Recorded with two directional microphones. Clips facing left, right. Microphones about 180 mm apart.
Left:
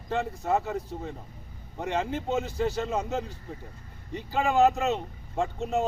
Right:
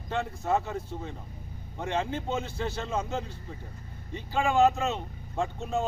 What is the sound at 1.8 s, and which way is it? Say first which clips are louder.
Speech: left 1 dB; centre (ahead or behind).